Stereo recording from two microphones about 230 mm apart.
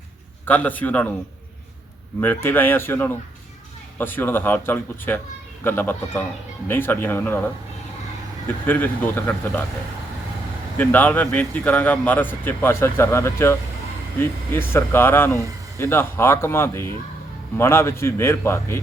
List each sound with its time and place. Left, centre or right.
0.4 s speech: centre
2.2 s speech: centre
10.8 s speech: centre